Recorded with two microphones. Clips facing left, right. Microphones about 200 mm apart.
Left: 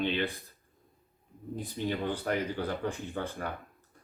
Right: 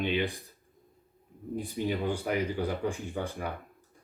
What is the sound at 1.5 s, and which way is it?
Speech, 10° right (ahead or behind).